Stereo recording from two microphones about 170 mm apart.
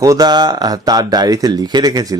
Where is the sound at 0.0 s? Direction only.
20° right (ahead or behind).